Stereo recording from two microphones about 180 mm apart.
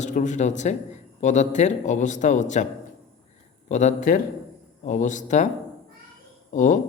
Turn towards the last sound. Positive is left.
turn(degrees=45)  # may be behind; listen again after turning